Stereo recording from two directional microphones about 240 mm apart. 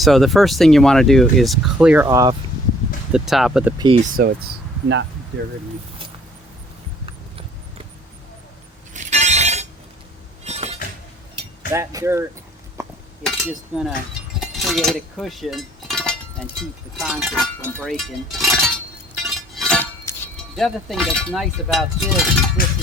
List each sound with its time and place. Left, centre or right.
0.0 s speech: centre
3.1 s speech: centre
4.2 s speech: right
7.0 s horse: right
8.9 s a sound: right
11.7 s speech: centre
12.8 s chink: centre
13.2 s speech: centre
19.1 s music: centre
22.6 s cowbell: left